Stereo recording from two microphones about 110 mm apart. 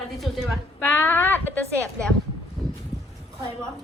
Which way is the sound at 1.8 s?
5° left (ahead or behind).